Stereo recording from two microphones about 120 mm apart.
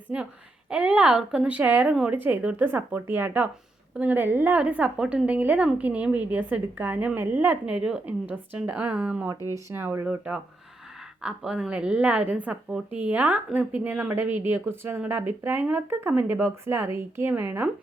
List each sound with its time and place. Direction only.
0.1 s a woman's voice: 10° right (ahead or behind)